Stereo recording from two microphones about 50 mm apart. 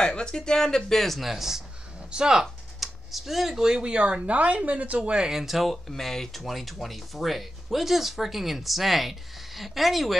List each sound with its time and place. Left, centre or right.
0.0 s speech: centre
2.0 s speech: centre
2.8 s speech: centre